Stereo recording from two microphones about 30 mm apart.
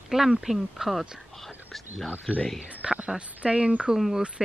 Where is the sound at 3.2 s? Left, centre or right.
Right.